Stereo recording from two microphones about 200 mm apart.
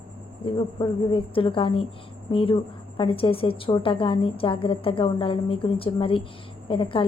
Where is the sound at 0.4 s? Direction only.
25° left (ahead or behind).